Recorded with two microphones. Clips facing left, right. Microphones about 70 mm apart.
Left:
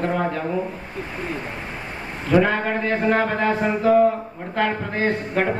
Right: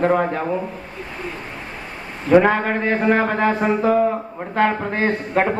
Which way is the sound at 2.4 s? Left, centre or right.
Right.